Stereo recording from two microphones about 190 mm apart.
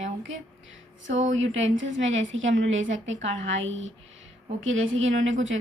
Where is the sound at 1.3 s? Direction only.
85° right.